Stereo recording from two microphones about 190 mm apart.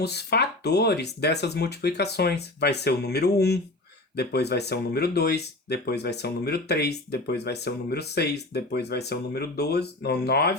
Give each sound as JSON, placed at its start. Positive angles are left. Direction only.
{"t": 0.0, "sound": "speech", "side_deg": 60}